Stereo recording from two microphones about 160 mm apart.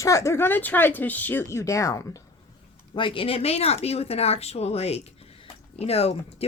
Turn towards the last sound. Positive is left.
turn(degrees=40)  # may be behind; listen again after turning